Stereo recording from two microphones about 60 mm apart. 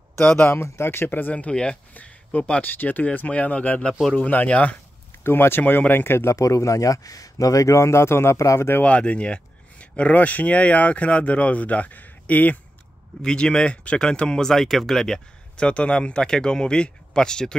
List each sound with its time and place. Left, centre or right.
0.4 s speech: left; by 2.6 s centre
2.6 s speech: left
5.2 s speech: left
6.3 s speech: left
8.8 s speech: left
13.2 s speech: centre